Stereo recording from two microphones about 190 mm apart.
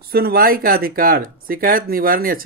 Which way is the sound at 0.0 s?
55° right (ahead or behind).